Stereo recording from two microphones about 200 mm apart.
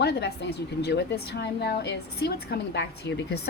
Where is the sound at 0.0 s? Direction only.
55° left (ahead or behind).